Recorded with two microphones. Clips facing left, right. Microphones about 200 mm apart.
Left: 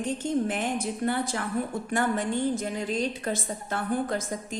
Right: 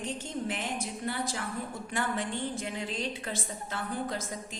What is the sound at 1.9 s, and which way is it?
A woman's voice, 45° left (ahead or behind).